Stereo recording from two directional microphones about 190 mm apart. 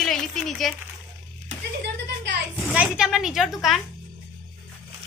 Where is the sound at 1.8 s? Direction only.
65° right (ahead or behind).